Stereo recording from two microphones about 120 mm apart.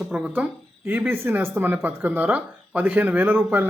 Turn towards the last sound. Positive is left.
turn(degrees=-15)  # may be behind; listen again after turning